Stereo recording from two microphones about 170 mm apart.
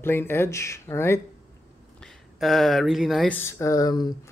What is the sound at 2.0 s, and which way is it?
Speech, centre (ahead or behind).